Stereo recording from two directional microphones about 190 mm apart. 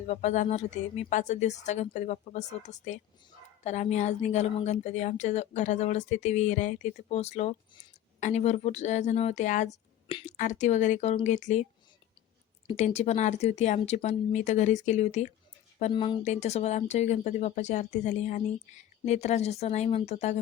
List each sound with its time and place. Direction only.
0.1 s speech: 35° left (ahead or behind)
10.1 s speech: 25° left (ahead or behind)
10.3 s speech: 40° left (ahead or behind)
12.6 s speech: 35° left (ahead or behind)
15.9 s speech: 25° left (ahead or behind)
16.2 s speech: 35° left (ahead or behind)